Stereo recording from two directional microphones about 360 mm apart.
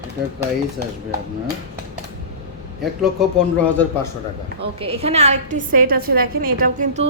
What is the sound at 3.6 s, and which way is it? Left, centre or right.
Speech, centre.